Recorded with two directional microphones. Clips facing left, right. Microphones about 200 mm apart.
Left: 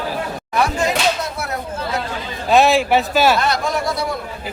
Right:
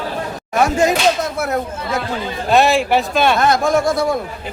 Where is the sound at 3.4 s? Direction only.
50° right (ahead or behind).